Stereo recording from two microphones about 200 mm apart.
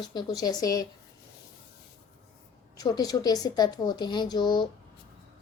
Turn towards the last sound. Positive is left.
turn(degrees=20)  # may be behind; listen again after turning